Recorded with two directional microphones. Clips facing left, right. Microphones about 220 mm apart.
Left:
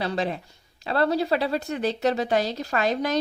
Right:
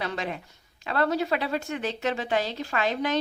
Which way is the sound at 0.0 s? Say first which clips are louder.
Left 5 dB; 35° left (ahead or behind).